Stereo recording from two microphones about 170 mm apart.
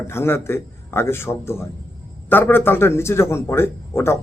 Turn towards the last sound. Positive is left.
turn(degrees=15)  # may be behind; listen again after turning